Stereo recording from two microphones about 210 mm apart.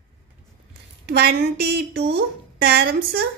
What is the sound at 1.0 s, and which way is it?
A woman's voice, 50° right (ahead or behind).